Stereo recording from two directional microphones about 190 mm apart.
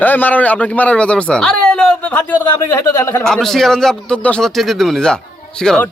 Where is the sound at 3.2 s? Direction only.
5° left (ahead or behind).